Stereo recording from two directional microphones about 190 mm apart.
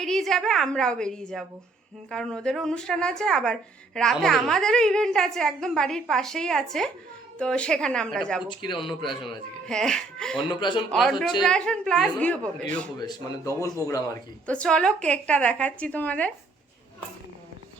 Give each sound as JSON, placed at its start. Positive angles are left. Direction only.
{"t": 0.0, "sound": "a woman's voice", "side_deg": 0}
{"t": 8.4, "sound": "speech", "side_deg": 25}
{"t": 9.6, "sound": "a woman's voice", "side_deg": 5}
{"t": 10.5, "sound": "speech", "side_deg": 25}
{"t": 10.9, "sound": "a woman's voice", "side_deg": 0}
{"t": 13.0, "sound": "a woman's voice", "side_deg": 20}
{"t": 14.4, "sound": "a woman's voice", "side_deg": 5}